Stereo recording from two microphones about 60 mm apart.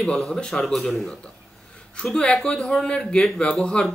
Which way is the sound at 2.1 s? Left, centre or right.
Centre.